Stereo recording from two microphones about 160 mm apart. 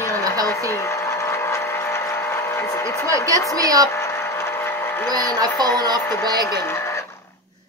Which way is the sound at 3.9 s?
15° left (ahead or behind).